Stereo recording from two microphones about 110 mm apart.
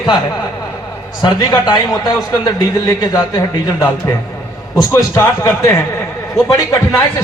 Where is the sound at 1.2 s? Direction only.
40° left (ahead or behind).